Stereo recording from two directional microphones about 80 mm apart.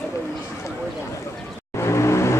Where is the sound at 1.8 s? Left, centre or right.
Left.